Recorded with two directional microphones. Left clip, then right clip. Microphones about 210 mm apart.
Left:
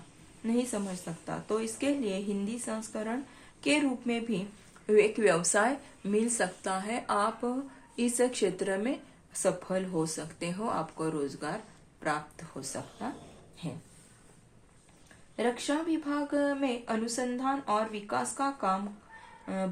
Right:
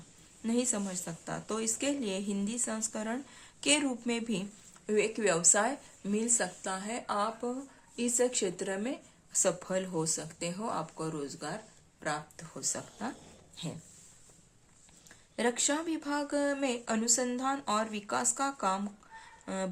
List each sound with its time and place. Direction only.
0.4 s speech: 20° right (ahead or behind)
15.4 s speech: 30° right (ahead or behind)